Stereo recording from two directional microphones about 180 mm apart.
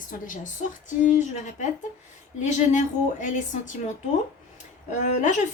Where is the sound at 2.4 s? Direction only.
40° left (ahead or behind).